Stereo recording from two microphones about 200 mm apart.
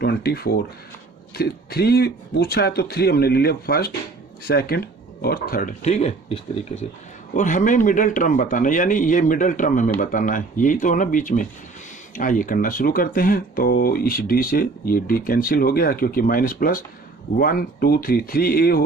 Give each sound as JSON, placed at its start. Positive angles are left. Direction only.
{"t": 0.0, "sound": "a man's voice", "side_deg": 50}